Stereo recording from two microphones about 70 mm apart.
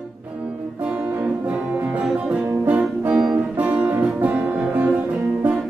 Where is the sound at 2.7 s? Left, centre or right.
Right.